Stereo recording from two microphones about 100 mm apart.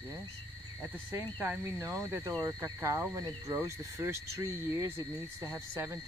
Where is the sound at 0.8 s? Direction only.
20° right (ahead or behind).